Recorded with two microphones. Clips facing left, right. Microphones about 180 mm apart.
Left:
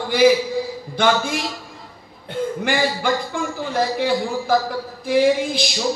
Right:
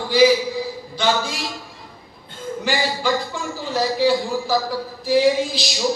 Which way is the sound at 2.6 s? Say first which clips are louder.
Right 1 dB; 55° left (ahead or behind).